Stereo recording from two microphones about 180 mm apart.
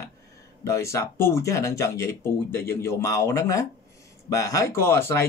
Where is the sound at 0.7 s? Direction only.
15° left (ahead or behind).